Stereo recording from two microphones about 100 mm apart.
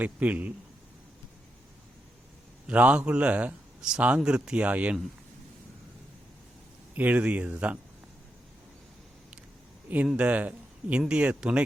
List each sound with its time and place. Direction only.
0.0 s speech: 15° right (ahead or behind)
2.6 s speech: 15° right (ahead or behind)
6.9 s speech: 15° right (ahead or behind)
9.9 s speech: 15° right (ahead or behind)